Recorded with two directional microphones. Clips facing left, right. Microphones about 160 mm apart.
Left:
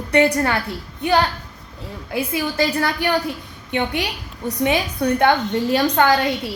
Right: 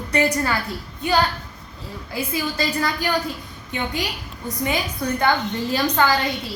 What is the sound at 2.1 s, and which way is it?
A woman's voice, 65° left (ahead or behind).